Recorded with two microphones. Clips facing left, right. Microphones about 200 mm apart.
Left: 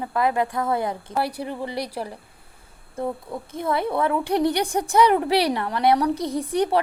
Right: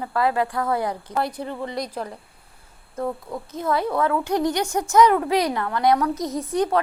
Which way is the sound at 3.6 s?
25° left (ahead or behind).